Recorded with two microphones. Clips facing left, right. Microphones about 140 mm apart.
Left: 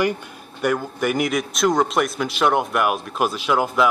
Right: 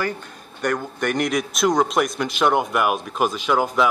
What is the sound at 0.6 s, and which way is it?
A man's voice, 5° left (ahead or behind).